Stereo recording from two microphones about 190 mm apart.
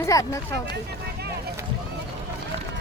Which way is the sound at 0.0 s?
15° left (ahead or behind).